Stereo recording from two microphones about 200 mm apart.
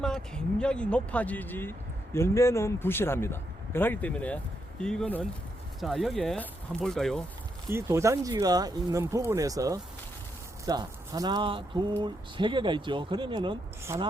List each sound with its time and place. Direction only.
0.0 s a man's voice: 5° left (ahead or behind)
7.7 s speech: 15° right (ahead or behind)